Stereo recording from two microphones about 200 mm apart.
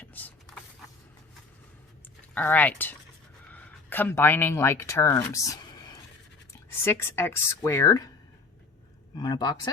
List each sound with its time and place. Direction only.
0.0 s a sound: 10° left (ahead or behind)
2.3 s speech: 10° left (ahead or behind)
9.1 s speech: 20° left (ahead or behind)